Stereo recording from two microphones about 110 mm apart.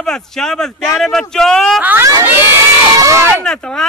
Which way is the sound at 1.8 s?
20° right (ahead or behind).